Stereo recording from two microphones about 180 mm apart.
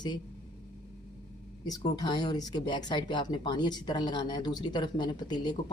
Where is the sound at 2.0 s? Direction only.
25° left (ahead or behind).